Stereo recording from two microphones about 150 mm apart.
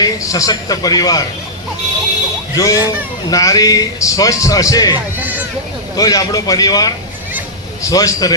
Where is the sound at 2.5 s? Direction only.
25° left (ahead or behind).